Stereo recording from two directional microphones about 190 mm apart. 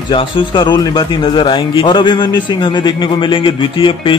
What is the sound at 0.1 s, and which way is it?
A man's voice, 25° left (ahead or behind).